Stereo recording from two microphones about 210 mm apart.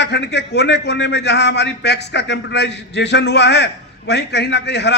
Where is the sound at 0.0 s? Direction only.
55° left (ahead or behind).